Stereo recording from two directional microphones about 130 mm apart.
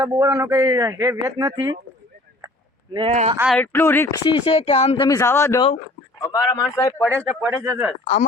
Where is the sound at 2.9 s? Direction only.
40° right (ahead or behind).